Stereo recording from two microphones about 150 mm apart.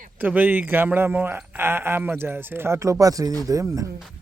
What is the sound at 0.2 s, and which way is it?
Speech, 10° right (ahead or behind).